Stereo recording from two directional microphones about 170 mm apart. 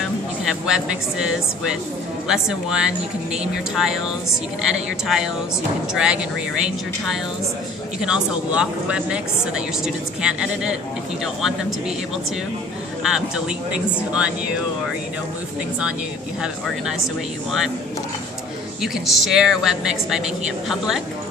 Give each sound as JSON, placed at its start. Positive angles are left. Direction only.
{"t": 0.0, "sound": "speech", "side_deg": -5}
{"t": 8.0, "sound": "speech", "side_deg": -5}
{"t": 13.0, "sound": "speech", "side_deg": -5}
{"t": 16.4, "sound": "speech", "side_deg": -5}
{"t": 18.8, "sound": "speech", "side_deg": 0}